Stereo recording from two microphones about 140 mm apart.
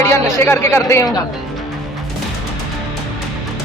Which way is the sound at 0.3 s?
20° left (ahead or behind).